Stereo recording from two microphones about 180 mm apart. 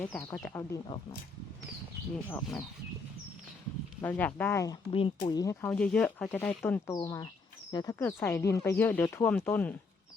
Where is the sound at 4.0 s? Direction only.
10° left (ahead or behind).